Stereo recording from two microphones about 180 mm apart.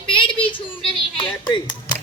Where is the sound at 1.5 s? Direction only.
25° left (ahead or behind).